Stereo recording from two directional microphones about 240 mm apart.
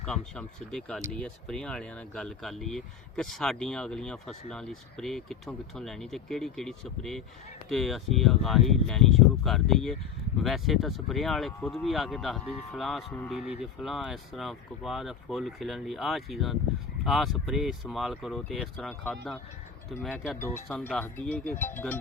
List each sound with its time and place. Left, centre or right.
0.0 s speech: centre
13.4 s speech: left
13.8 s speech: centre